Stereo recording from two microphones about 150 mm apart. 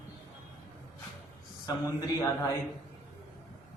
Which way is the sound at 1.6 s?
20° left (ahead or behind).